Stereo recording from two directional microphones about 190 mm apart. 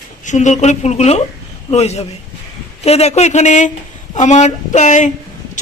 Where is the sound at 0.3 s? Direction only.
40° left (ahead or behind).